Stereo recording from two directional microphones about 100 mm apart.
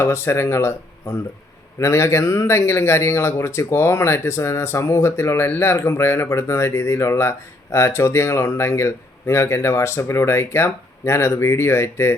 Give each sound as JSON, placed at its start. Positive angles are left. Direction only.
{"t": 0.0, "sound": "speech", "side_deg": 25}
{"t": 1.8, "sound": "speech", "side_deg": 30}